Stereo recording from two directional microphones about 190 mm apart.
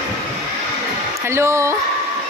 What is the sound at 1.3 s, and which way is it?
Speech, 15° right (ahead or behind).